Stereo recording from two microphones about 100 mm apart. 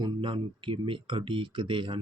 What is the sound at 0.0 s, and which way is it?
Speech, 55° right (ahead or behind).